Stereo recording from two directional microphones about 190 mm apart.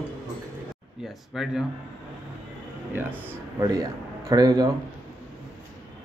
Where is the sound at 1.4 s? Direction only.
Centre (ahead or behind).